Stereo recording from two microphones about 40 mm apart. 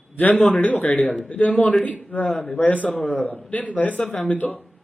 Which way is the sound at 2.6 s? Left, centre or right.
Left.